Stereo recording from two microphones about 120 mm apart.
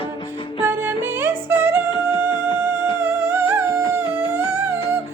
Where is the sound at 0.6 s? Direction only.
15° right (ahead or behind).